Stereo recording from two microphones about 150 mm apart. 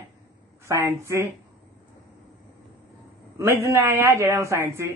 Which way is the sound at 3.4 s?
20° right (ahead or behind).